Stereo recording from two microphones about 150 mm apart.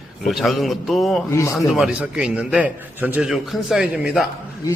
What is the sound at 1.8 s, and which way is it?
A man's voice, 5° right (ahead or behind).